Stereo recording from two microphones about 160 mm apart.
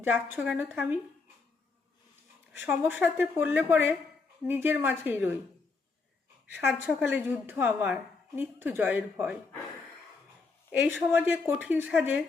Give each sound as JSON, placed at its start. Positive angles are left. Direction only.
{"t": 0.0, "sound": "speech", "side_deg": -10}
{"t": 2.6, "sound": "speech", "side_deg": -10}
{"t": 6.5, "sound": "speech", "side_deg": -15}
{"t": 10.7, "sound": "speech", "side_deg": -15}